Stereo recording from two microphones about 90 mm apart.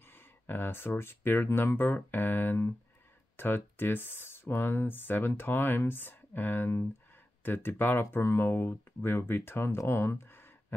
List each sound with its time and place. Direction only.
0.0 s speech: 25° left (ahead or behind)